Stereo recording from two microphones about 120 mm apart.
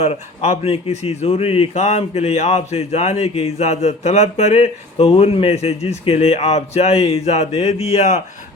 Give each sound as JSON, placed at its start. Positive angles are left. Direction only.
{"t": 0.0, "sound": "speech", "side_deg": 65}